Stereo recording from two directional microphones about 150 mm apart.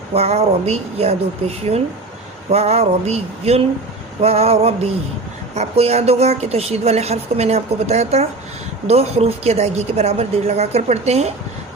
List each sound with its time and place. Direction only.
0.1 s a woman's voice: 45° right (ahead or behind)